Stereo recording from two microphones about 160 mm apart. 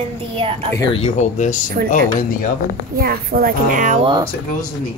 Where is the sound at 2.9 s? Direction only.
70° right (ahead or behind); by 4.0 s 55° right (ahead or behind).